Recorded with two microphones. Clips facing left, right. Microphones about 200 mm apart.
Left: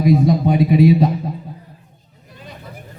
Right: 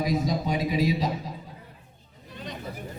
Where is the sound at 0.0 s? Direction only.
60° left (ahead or behind).